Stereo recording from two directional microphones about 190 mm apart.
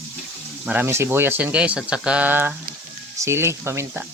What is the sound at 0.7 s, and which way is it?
Speech, 10° right (ahead or behind).